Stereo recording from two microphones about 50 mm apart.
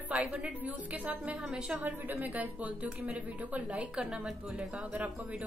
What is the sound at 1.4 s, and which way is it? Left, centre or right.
Speech, centre.